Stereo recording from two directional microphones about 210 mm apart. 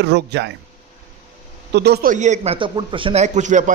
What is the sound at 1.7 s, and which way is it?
Speech, 50° right (ahead or behind).